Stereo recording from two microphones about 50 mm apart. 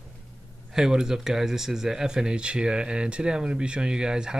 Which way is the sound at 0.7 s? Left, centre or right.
Centre.